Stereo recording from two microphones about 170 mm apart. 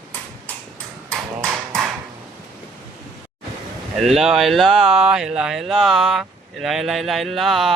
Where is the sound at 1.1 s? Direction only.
5° left (ahead or behind).